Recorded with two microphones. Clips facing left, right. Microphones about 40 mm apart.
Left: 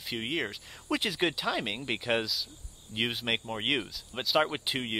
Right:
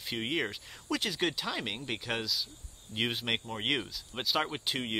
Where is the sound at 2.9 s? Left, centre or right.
Centre.